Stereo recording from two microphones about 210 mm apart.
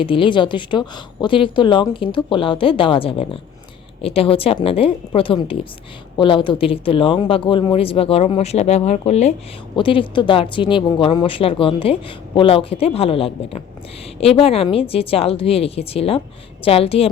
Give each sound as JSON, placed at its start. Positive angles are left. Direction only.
{"t": 0.0, "sound": "speech", "side_deg": 25}